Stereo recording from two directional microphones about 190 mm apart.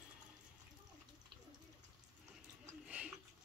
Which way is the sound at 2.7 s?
5° right (ahead or behind).